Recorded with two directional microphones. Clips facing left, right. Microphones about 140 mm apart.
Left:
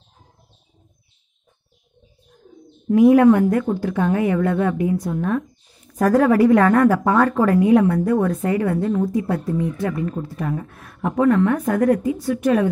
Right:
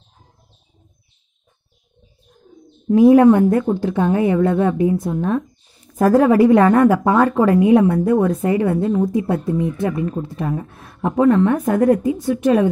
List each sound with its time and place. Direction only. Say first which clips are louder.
2.9 s a woman's voice: right 2 dB; 30° right (ahead or behind)